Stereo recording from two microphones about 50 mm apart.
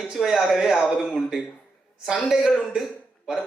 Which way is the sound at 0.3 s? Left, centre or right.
Centre.